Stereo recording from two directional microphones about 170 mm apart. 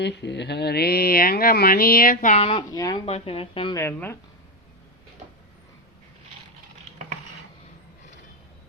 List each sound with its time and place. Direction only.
0.0 s mantra: 90° left; by 2.3 s 60° left (ahead or behind)
2.3 s speech: 35° left (ahead or behind)
3.1 s speech: 35° left (ahead or behind)
3.8 s speech: 15° left (ahead or behind)